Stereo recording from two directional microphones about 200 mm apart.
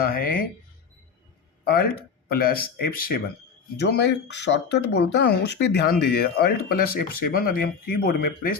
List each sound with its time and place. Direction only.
0.0 s speech: 45° left (ahead or behind)
1.6 s speech: 50° left (ahead or behind)